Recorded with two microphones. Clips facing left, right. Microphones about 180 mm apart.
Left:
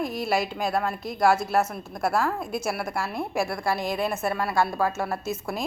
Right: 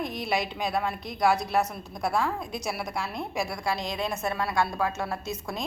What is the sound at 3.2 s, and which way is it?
Speech, 55° left (ahead or behind).